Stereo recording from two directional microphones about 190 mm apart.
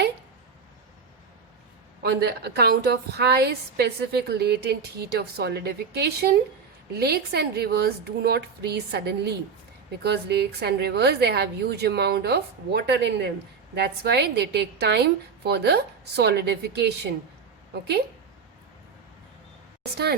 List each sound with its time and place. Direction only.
2.0 s a woman's voice: 60° right (ahead or behind)